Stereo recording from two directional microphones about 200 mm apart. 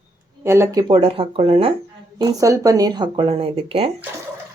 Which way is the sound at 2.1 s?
20° right (ahead or behind).